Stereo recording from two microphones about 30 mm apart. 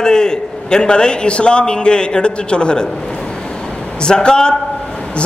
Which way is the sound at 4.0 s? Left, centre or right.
Left.